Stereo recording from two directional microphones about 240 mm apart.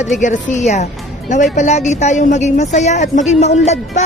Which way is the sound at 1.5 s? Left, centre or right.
Left.